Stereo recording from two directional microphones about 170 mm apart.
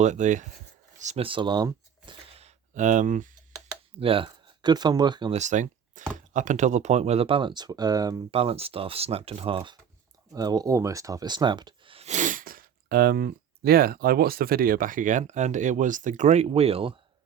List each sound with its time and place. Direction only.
0.0 s speech: 45° right (ahead or behind)
4.0 s speech: 30° right (ahead or behind)
5.3 s speech: 45° right (ahead or behind); by 8.2 s 20° right (ahead or behind)
8.3 s speech: 35° right (ahead or behind)
10.3 s speech: 20° right (ahead or behind)